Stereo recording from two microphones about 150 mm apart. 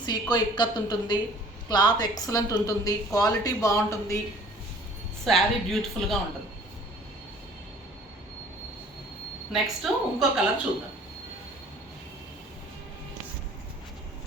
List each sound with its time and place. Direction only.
0.0 s speech: 30° left (ahead or behind)
5.2 s speech: centre (ahead or behind)
9.5 s speech: centre (ahead or behind)